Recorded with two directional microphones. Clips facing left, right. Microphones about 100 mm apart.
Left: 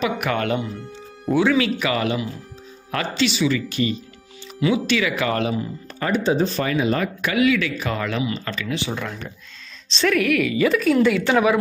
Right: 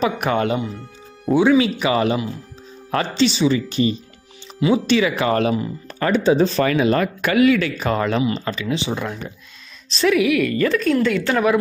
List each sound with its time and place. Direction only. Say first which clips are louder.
0.0 s speech: right 3 dB; 30° right (ahead or behind)
5.4 s speech: right 4 dB; 60° right (ahead or behind); by 8.5 s 35° right (ahead or behind)
8.5 s speech: right 3 dB; 25° right (ahead or behind)
10.0 s a woman's voice: right 3 dB; 5° right (ahead or behind)